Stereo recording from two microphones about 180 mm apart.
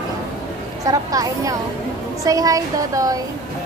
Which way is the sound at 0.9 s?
20° right (ahead or behind).